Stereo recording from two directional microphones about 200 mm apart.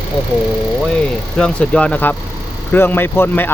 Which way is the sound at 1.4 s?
5° left (ahead or behind).